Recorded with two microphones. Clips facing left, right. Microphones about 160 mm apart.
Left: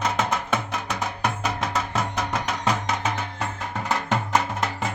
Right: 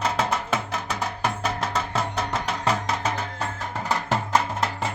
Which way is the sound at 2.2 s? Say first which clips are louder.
Even; 30° right (ahead or behind).